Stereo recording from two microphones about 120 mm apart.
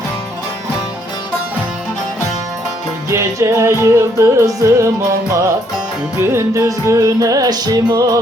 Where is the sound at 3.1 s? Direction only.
25° right (ahead or behind).